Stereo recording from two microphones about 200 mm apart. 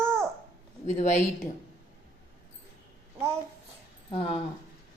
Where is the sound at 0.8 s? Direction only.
35° left (ahead or behind).